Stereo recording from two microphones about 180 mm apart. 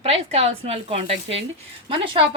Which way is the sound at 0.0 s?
35° right (ahead or behind).